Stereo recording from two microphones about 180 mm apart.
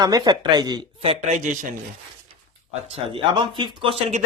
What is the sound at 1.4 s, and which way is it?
Speech, 45° right (ahead or behind).